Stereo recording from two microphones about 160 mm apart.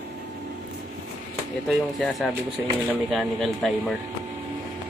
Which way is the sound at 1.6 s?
Centre (ahead or behind).